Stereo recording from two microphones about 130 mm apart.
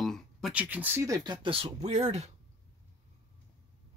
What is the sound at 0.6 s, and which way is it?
Speech, 10° right (ahead or behind).